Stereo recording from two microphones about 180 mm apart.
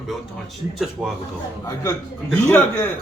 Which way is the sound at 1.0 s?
5° right (ahead or behind).